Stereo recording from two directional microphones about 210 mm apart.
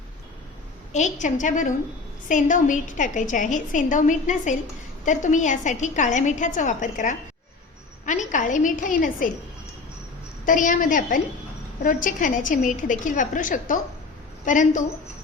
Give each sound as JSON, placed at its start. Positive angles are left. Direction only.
{"t": 0.9, "sound": "a woman's voice", "side_deg": 35}
{"t": 10.4, "sound": "a woman's voice", "side_deg": 40}